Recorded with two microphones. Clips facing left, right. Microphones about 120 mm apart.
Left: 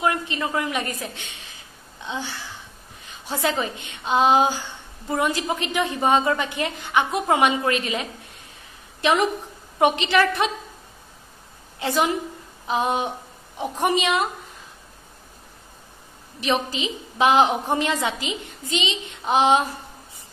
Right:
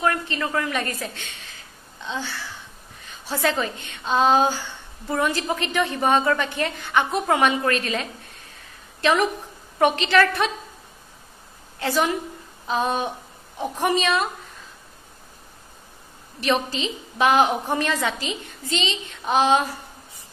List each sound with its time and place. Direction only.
0.0 s a woman's voice: 20° left (ahead or behind)
11.8 s a woman's voice: 20° left (ahead or behind)
16.3 s a woman's voice: 15° left (ahead or behind)